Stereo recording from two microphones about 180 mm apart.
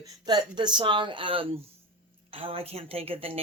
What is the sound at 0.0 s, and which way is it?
Speech, 25° right (ahead or behind).